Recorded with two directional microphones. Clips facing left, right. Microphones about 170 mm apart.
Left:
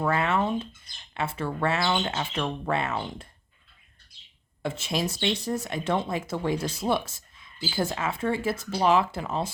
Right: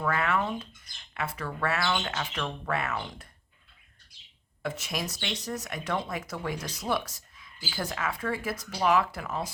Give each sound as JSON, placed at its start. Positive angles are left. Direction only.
{"t": 0.0, "sound": "speech", "side_deg": 25}
{"t": 4.6, "sound": "speech", "side_deg": 25}